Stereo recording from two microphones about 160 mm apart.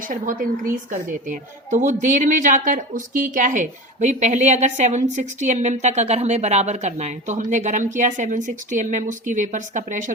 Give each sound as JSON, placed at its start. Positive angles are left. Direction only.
{"t": 0.1, "sound": "speech", "side_deg": -60}